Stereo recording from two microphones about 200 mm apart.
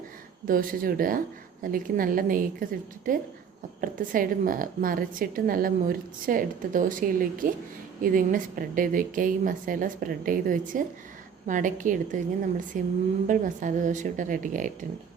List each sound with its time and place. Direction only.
0.4 s a woman's voice: 45° right (ahead or behind)